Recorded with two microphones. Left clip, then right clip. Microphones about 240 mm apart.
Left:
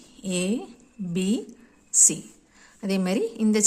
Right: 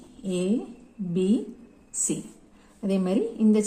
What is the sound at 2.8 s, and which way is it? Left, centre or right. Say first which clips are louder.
Speech: even; left.